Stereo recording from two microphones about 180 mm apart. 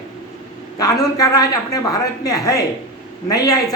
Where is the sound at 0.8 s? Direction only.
20° left (ahead or behind).